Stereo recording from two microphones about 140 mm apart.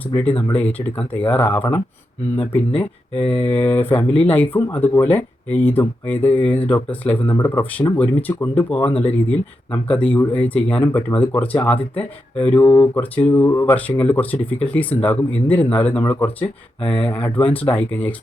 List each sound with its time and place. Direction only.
0.1 s speech: 10° left (ahead or behind)
9.9 s speech: 10° left (ahead or behind)
12.5 s speech: 25° left (ahead or behind)
13.0 s speech: 10° left (ahead or behind)